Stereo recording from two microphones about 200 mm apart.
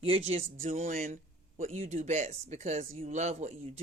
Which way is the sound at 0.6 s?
40° right (ahead or behind).